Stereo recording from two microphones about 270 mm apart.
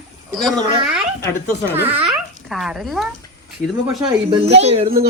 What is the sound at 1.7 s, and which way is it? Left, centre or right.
Speech, centre.